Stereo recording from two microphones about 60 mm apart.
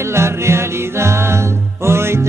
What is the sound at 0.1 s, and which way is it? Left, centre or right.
Music, right.